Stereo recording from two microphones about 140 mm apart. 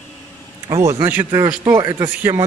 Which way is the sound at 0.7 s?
25° right (ahead or behind).